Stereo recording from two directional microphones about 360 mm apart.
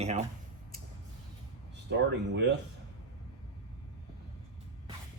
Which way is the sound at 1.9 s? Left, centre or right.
Right.